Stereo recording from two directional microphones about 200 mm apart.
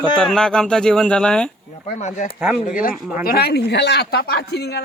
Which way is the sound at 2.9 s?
5° right (ahead or behind).